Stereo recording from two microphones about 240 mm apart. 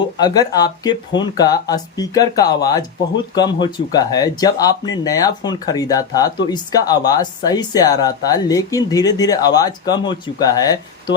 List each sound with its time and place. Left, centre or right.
0.0 s speech: centre